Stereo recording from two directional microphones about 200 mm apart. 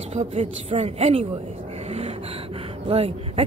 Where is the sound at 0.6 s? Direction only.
30° right (ahead or behind).